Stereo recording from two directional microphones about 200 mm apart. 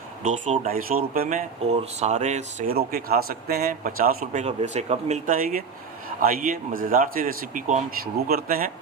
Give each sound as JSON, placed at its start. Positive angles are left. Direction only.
{"t": 0.2, "sound": "speech", "side_deg": -35}
{"t": 0.7, "sound": "speech", "side_deg": -45}
{"t": 2.7, "sound": "speech", "side_deg": -50}
{"t": 4.3, "sound": "speech", "side_deg": -35}